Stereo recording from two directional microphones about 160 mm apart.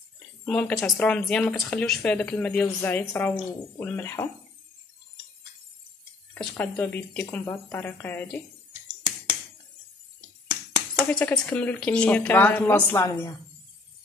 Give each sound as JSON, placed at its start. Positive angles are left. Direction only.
{"t": 0.5, "sound": "a woman's voice", "side_deg": 5}
{"t": 6.3, "sound": "a woman's voice", "side_deg": 10}
{"t": 11.0, "sound": "a woman's voice", "side_deg": 5}
{"t": 13.0, "sound": "a woman's voice", "side_deg": 20}